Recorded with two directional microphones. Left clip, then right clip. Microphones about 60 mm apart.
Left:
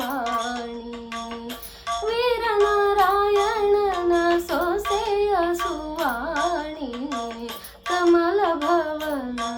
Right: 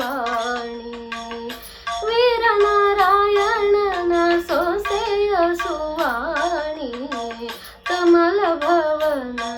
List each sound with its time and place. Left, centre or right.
2.0 s child singing: left
7.9 s music: left